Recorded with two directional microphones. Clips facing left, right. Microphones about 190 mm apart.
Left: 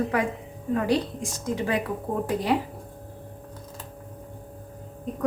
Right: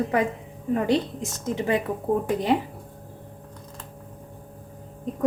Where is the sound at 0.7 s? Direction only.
25° right (ahead or behind).